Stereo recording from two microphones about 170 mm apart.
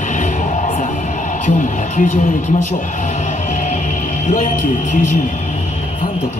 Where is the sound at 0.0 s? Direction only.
50° left (ahead or behind).